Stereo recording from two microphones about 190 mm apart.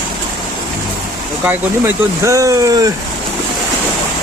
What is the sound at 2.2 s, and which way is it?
Speech, 15° right (ahead or behind).